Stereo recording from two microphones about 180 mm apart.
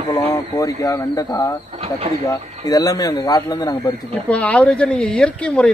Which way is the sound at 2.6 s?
20° left (ahead or behind).